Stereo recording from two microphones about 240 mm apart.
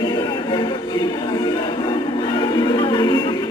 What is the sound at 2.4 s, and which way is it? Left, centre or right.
Music, centre.